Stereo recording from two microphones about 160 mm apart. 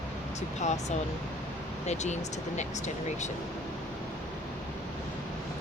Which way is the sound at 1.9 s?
45° left (ahead or behind).